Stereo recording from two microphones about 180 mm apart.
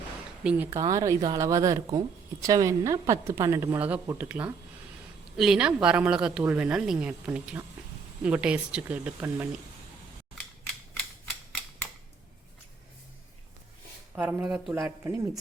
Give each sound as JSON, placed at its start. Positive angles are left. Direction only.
{"t": 0.4, "sound": "a woman's voice", "side_deg": -15}
{"t": 14.2, "sound": "speech", "side_deg": -10}